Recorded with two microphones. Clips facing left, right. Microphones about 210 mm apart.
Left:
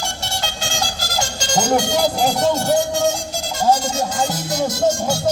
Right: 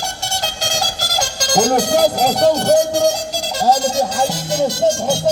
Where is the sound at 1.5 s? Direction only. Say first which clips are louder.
Right 3 dB; 40° right (ahead or behind).